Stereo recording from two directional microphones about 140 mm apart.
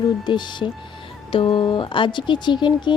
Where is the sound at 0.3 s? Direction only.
35° left (ahead or behind).